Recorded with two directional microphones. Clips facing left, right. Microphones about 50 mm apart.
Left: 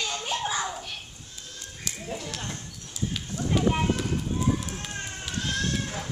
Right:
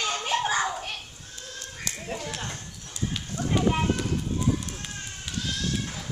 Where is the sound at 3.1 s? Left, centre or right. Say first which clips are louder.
Even; centre.